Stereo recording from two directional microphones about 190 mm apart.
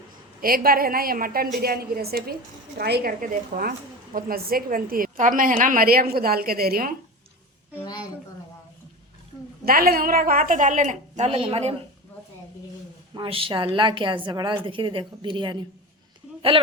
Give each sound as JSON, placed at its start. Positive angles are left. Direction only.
{"t": 0.4, "sound": "a woman's voice", "side_deg": -50}
{"t": 9.6, "sound": "a woman's voice", "side_deg": -50}
{"t": 13.1, "sound": "a woman's voice", "side_deg": -30}